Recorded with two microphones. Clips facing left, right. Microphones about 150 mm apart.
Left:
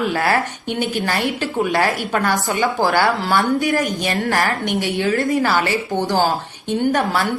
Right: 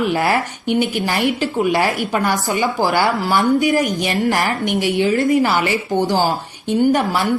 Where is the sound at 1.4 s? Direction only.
10° right (ahead or behind).